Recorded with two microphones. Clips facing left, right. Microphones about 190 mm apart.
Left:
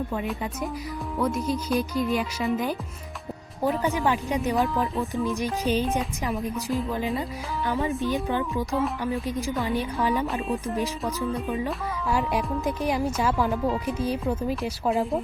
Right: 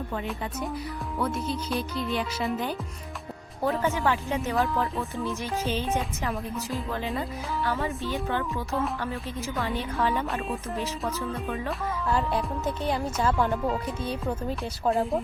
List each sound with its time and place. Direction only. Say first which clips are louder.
0.1 s speech: left 3 dB; 5° left (ahead or behind)
3.6 s speech: left 1 dB; 15° left (ahead or behind)
7.2 s speech: even; 15° left (ahead or behind)
8.7 s speech: left 2 dB; centre (ahead or behind)
9.6 s speech: even; 10° left (ahead or behind)
12.0 s speech: left 2 dB; 10° left (ahead or behind)